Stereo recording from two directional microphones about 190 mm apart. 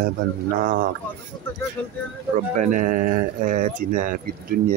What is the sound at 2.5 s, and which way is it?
Speech, 45° right (ahead or behind).